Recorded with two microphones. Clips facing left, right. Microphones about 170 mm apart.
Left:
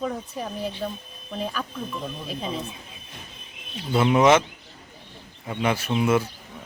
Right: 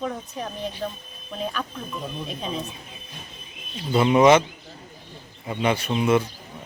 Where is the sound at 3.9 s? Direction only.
Centre (ahead or behind).